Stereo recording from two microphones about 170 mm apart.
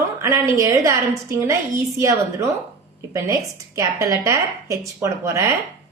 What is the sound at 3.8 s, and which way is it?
A woman's voice, 20° right (ahead or behind).